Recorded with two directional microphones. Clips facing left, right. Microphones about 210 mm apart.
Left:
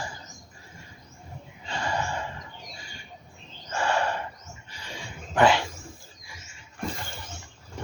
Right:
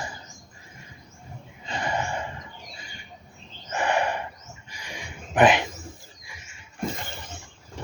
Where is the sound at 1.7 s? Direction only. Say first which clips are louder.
Right 1 dB; 20° right (ahead or behind).